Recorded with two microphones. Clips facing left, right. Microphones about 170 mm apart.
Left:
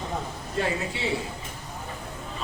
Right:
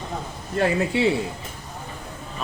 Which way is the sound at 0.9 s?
60° right (ahead or behind).